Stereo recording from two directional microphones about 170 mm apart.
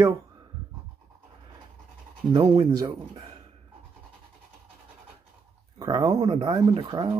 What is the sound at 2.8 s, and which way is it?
Speech, 20° right (ahead or behind).